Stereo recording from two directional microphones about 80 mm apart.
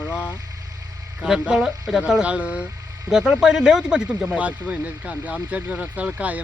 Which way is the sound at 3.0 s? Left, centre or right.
Centre.